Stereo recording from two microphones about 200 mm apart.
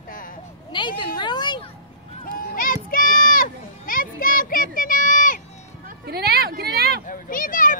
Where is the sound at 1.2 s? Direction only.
20° left (ahead or behind).